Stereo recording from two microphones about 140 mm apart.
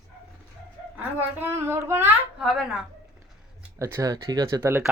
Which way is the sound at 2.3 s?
Centre (ahead or behind).